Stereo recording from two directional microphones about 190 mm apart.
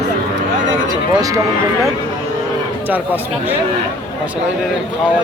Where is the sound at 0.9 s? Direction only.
20° right (ahead or behind).